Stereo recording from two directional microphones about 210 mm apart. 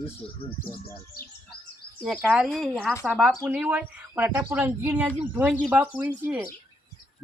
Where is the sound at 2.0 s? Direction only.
Centre (ahead or behind).